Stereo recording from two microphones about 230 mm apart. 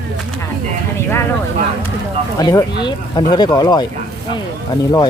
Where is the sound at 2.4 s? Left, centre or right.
Centre.